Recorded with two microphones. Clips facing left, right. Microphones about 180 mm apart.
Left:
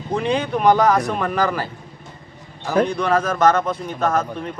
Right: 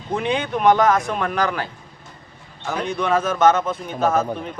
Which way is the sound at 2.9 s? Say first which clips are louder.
Left 1 dB; centre (ahead or behind).